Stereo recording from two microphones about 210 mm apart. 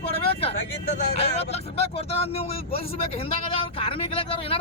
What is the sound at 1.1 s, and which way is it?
Speech, 30° left (ahead or behind).